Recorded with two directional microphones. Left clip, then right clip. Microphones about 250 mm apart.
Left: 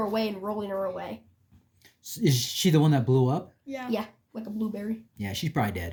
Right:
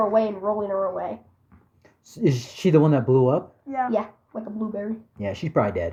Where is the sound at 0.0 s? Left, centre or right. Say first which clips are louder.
Right 8 dB; left.